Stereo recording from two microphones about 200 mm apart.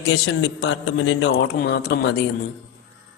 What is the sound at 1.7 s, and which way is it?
Speech, 55° left (ahead or behind).